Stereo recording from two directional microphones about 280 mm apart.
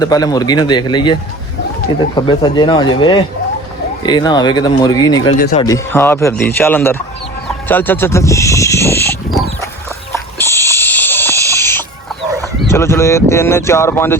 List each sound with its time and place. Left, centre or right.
0.0 s speech: centre
10.3 s owl: centre
12.7 s speech: centre